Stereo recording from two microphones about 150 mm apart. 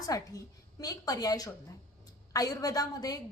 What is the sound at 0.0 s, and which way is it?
A woman's voice, 25° left (ahead or behind).